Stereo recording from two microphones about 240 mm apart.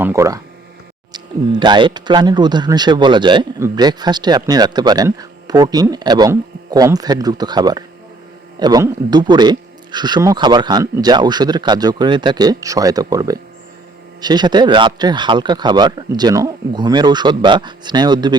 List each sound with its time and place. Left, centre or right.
0.0 s speech: centre